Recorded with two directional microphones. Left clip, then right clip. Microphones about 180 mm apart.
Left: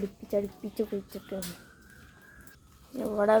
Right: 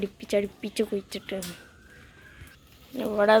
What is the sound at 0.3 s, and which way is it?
Speech, 25° right (ahead or behind).